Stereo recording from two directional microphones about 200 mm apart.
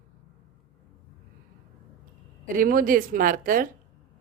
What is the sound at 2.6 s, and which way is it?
Speech, 45° right (ahead or behind).